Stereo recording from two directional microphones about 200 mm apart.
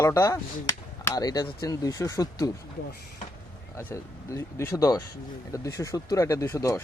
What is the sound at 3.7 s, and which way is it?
Speech, 10° left (ahead or behind).